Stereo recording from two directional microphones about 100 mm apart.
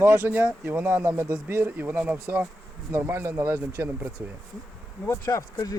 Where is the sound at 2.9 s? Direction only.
25° right (ahead or behind).